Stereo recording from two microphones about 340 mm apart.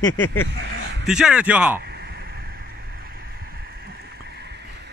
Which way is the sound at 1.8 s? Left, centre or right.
Right.